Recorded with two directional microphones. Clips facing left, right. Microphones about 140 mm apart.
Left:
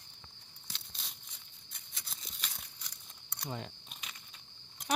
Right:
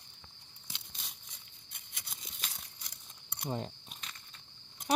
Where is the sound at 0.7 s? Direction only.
15° right (ahead or behind).